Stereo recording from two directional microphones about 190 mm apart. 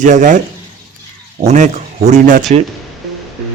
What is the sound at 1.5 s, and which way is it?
Speech, 40° right (ahead or behind).